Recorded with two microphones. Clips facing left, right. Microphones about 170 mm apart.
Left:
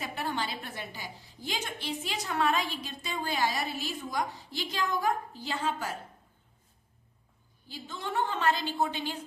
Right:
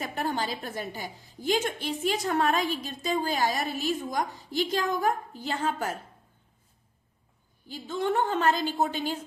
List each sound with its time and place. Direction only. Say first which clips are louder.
0.0 s a woman's voice: right 4 dB; 45° right (ahead or behind)
7.7 s a woman's voice: right 8 dB; 50° right (ahead or behind)